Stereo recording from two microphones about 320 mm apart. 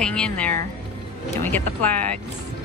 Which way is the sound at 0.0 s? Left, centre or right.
Centre.